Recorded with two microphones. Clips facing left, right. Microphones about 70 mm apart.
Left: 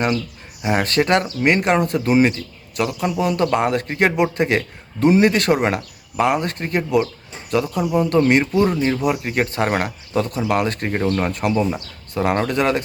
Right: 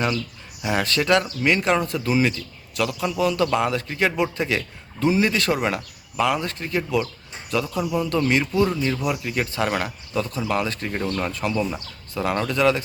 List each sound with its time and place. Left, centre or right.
0.6 s speech: left
3.6 s speech: left
5.5 s speech: left
8.8 s speech: left
11.0 s speech: left
11.3 s speech: left